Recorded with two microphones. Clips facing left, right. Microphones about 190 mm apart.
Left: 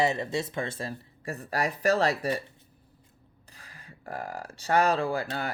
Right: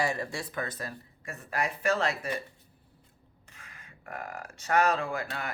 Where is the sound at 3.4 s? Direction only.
35° left (ahead or behind).